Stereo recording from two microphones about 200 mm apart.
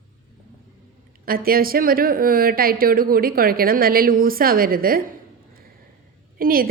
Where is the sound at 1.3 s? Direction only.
45° right (ahead or behind).